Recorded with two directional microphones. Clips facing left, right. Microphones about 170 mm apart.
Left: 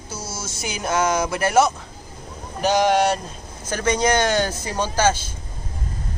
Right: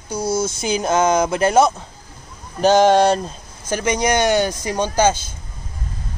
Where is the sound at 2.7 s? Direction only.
25° right (ahead or behind).